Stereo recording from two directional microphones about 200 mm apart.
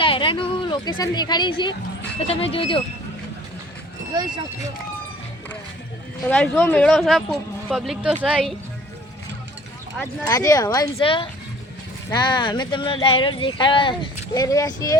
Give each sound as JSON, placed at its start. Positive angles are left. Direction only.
{"t": 0.0, "sound": "speech", "side_deg": 25}
{"t": 6.3, "sound": "speech", "side_deg": 5}
{"t": 10.0, "sound": "speech", "side_deg": 15}